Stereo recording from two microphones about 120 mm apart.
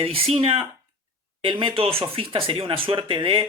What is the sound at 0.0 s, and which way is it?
Speech, 50° right (ahead or behind).